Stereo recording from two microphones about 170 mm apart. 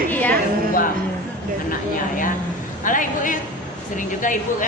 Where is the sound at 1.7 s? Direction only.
50° left (ahead or behind).